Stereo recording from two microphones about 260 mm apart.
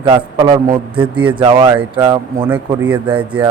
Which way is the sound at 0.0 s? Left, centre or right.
Centre.